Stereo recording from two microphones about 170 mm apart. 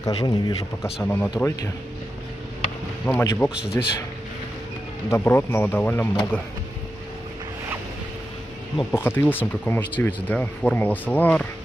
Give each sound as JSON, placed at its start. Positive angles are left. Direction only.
{"t": 0.0, "sound": "speech", "side_deg": 25}
{"t": 1.0, "sound": "speech", "side_deg": 10}
{"t": 1.3, "sound": "speech", "side_deg": 20}
{"t": 3.1, "sound": "speech", "side_deg": 10}
{"t": 3.4, "sound": "a man's voice", "side_deg": -5}
{"t": 5.1, "sound": "speech", "side_deg": 15}
{"t": 8.9, "sound": "speech", "side_deg": 15}